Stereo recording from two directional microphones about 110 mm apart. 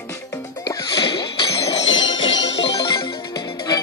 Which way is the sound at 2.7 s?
45° left (ahead or behind).